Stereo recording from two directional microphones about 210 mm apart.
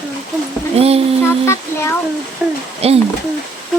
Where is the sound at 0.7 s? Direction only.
30° right (ahead or behind).